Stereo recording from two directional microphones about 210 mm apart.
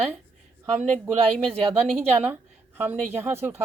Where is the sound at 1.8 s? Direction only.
5° right (ahead or behind).